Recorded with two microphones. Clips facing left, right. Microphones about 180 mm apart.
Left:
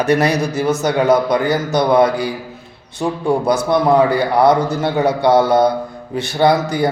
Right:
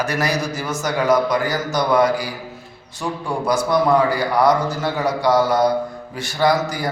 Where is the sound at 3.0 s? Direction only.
25° left (ahead or behind).